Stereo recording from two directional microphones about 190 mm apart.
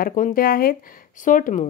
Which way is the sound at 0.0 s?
45° left (ahead or behind).